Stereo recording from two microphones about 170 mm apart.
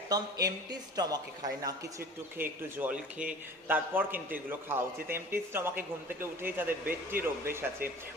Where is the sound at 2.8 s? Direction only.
5° right (ahead or behind).